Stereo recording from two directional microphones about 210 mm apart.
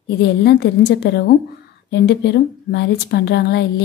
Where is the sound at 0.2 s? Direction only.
50° left (ahead or behind).